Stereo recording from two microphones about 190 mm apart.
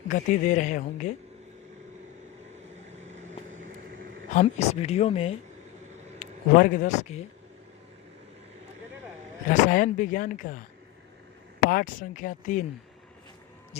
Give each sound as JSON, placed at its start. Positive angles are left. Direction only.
{"t": 0.1, "sound": "a woman's voice", "side_deg": 40}
{"t": 4.4, "sound": "a woman's voice", "side_deg": 35}
{"t": 6.1, "sound": "speech", "side_deg": 45}
{"t": 9.5, "sound": "speech", "side_deg": 45}
{"t": 11.7, "sound": "speech", "side_deg": 50}